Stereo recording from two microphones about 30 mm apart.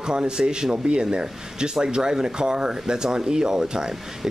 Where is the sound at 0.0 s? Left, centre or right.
Right.